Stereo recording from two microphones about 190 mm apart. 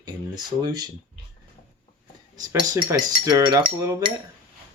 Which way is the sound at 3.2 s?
20° right (ahead or behind).